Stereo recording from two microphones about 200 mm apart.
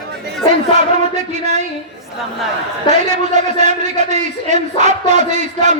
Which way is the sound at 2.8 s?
35° right (ahead or behind).